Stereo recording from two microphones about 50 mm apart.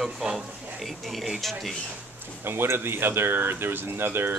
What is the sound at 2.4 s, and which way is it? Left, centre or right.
Speech, right.